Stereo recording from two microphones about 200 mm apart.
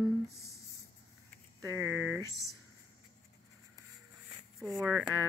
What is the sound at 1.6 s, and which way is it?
Speech, 15° right (ahead or behind).